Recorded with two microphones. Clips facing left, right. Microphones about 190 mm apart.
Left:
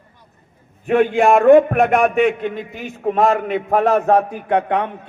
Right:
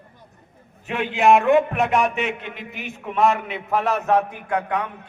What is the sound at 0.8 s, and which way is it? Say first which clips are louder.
A man's voice: left 4 dB; 50° left (ahead or behind).